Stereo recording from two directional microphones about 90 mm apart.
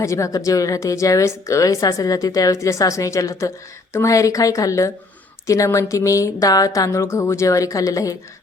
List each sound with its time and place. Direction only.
0.0 s a woman's voice: 35° left (ahead or behind)